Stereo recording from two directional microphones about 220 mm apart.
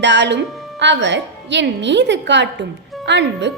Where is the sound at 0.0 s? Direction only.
50° right (ahead or behind).